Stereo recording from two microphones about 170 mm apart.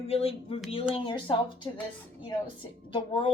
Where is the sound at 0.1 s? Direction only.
35° left (ahead or behind).